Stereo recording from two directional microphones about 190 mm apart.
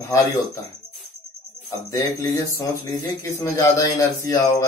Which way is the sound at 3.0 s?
15° left (ahead or behind).